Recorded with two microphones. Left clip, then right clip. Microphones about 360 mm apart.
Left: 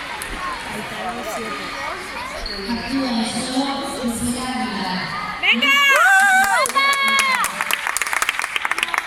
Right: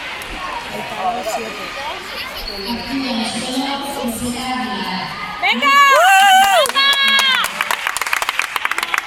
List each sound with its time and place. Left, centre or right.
5.5 s a woman's voice: centre
6.1 s crowd: centre
6.7 s run: centre